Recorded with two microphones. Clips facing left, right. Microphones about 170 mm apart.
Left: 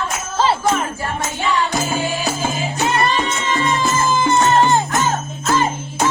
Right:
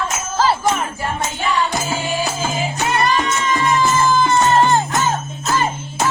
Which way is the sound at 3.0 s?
25° left (ahead or behind).